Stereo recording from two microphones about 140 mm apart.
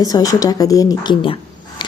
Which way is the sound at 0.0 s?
25° left (ahead or behind).